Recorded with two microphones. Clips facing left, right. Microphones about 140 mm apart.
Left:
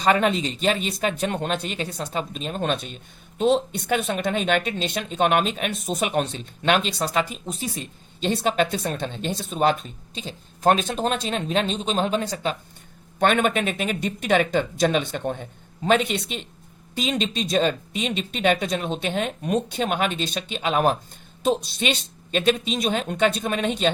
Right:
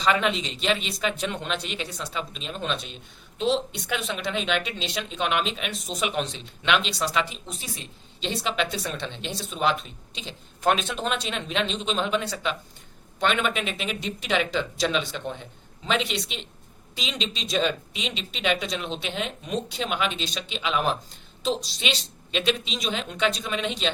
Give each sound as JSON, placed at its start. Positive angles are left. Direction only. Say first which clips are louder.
{"t": 0.0, "sound": "speech", "louder": "left 4 dB", "side_deg": 45}